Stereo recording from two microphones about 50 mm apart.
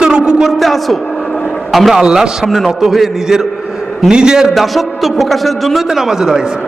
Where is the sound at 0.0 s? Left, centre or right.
Centre.